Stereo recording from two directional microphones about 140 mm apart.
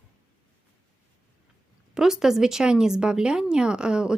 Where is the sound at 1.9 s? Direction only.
5° right (ahead or behind).